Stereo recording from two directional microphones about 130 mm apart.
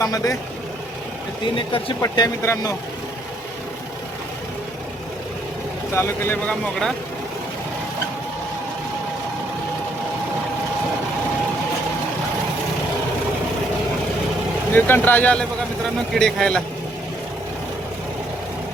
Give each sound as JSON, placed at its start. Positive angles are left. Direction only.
{"t": 0.0, "sound": "speech", "side_deg": 25}
{"t": 2.1, "sound": "speech", "side_deg": 25}
{"t": 5.9, "sound": "speech", "side_deg": 20}
{"t": 14.7, "sound": "a man's voice", "side_deg": 15}